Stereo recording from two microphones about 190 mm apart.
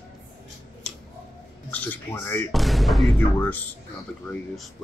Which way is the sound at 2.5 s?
Centre (ahead or behind).